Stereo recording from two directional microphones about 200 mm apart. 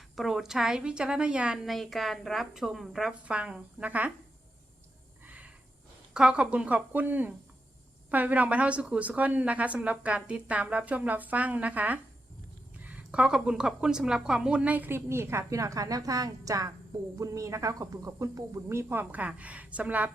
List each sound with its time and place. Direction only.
0.2 s a woman's voice: centre (ahead or behind)
5.2 s a sound: 10° right (ahead or behind)
6.1 s a woman's voice: 5° right (ahead or behind)